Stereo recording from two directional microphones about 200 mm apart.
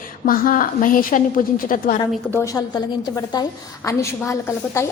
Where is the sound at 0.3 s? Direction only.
45° left (ahead or behind).